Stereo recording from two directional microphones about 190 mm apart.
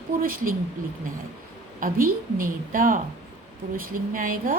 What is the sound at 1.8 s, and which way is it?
A woman's voice, 50° right (ahead or behind).